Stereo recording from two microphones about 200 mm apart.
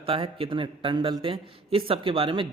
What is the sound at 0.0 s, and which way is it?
A man's voice, 25° right (ahead or behind).